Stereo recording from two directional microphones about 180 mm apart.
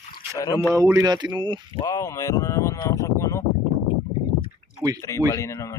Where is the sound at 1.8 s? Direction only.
20° left (ahead or behind).